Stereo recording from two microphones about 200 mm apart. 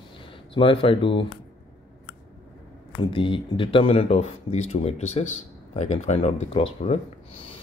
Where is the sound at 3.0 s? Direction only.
25° left (ahead or behind).